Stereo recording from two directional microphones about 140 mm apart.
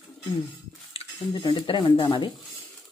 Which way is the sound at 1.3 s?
30° left (ahead or behind).